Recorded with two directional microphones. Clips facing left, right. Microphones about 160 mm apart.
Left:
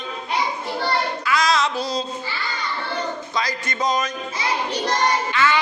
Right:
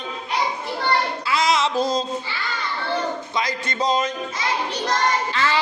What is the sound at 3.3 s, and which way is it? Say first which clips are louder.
Speech: right 1 dB; 25° right (ahead or behind).